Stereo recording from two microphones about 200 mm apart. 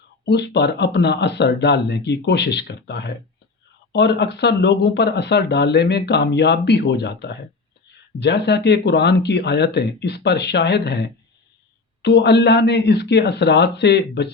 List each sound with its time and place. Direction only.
0.3 s speech: 55° left (ahead or behind)